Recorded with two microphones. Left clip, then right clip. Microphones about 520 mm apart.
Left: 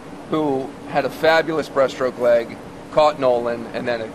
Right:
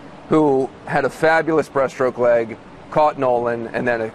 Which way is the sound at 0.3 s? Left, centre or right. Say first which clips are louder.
Right 5 dB; right.